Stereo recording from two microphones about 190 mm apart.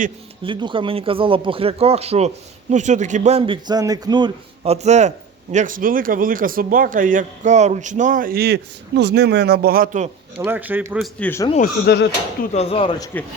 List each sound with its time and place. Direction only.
0.4 s speech: 25° right (ahead or behind); by 10.1 s 45° right (ahead or behind)
10.3 s a man's voice: 10° right (ahead or behind)
11.6 s speech: 55° left (ahead or behind)
12.5 s speech: 30° left (ahead or behind)